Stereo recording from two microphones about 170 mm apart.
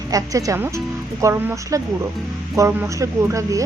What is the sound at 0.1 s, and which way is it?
Speech, 20° right (ahead or behind).